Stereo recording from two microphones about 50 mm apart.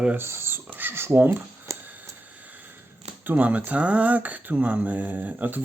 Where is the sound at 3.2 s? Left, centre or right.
Right.